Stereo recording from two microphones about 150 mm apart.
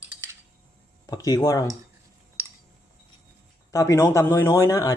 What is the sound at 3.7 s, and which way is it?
Speech, 20° left (ahead or behind).